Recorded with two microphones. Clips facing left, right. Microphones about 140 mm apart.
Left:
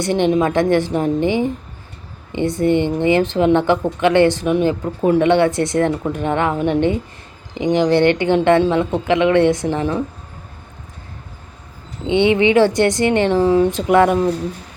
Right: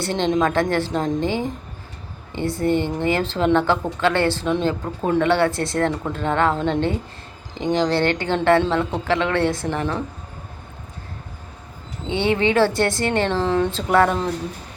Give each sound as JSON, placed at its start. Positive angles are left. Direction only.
{"t": 0.0, "sound": "a woman's voice", "side_deg": 15}
{"t": 12.0, "sound": "a woman's voice", "side_deg": 20}